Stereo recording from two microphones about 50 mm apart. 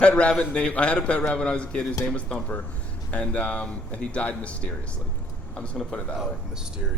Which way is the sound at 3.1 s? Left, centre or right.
Left.